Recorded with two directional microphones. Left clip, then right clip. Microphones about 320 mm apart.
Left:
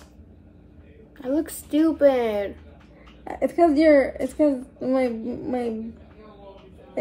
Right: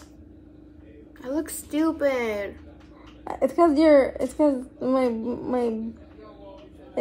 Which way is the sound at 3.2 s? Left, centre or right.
Right.